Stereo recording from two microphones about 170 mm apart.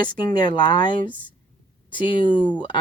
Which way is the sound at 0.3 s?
25° left (ahead or behind).